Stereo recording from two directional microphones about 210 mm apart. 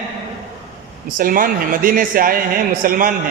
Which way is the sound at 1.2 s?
40° right (ahead or behind).